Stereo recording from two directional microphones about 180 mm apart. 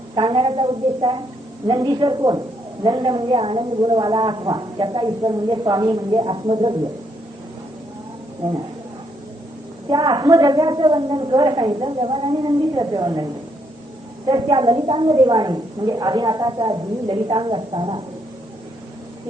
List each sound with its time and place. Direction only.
0.2 s a woman's voice: 25° right (ahead or behind)
9.9 s a woman's voice: 25° right (ahead or behind)
14.3 s a woman's voice: 25° right (ahead or behind)